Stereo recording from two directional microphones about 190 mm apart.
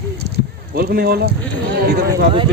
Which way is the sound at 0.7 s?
50° right (ahead or behind).